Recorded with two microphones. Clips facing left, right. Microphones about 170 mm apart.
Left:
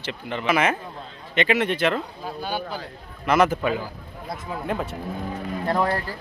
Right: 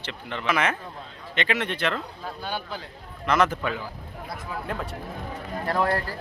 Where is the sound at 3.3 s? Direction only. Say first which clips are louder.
Left 3 dB; 10° left (ahead or behind).